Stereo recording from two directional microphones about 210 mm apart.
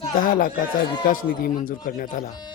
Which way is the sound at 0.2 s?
40° left (ahead or behind).